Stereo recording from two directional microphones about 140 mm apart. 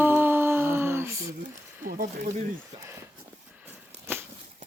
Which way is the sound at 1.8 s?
90° right.